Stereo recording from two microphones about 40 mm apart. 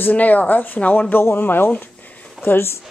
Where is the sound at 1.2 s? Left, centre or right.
Left.